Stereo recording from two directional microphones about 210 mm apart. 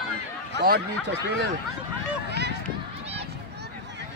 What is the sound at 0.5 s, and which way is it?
Speech, 50° right (ahead or behind).